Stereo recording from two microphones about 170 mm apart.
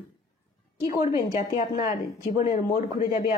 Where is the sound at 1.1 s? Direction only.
40° left (ahead or behind).